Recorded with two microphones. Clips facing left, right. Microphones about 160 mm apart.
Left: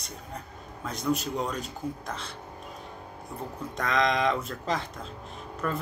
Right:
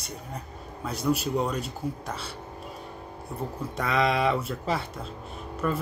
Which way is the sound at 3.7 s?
5° right (ahead or behind).